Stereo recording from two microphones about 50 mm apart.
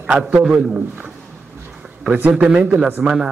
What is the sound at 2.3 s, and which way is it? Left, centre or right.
A man's voice, centre.